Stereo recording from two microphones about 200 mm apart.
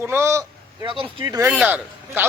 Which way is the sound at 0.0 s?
10° right (ahead or behind).